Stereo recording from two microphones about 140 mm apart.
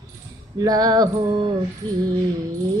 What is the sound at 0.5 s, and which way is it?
Music, 25° right (ahead or behind).